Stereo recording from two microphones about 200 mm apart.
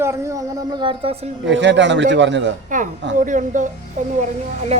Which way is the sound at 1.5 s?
65° right (ahead or behind).